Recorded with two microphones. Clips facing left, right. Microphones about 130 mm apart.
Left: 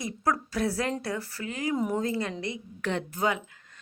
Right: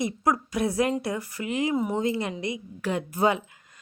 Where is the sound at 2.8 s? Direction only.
10° right (ahead or behind).